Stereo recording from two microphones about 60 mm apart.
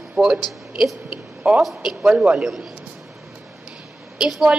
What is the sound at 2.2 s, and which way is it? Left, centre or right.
Speech, centre.